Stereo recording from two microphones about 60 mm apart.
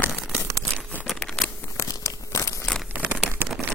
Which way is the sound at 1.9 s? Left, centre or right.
Left.